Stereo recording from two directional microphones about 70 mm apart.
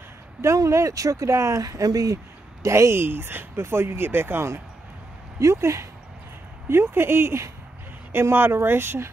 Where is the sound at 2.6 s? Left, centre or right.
Right.